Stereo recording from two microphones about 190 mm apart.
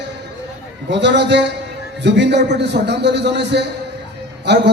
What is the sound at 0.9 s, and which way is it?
A man's voice, 65° right (ahead or behind).